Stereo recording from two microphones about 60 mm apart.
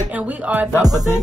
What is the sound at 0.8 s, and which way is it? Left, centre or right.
Music, right.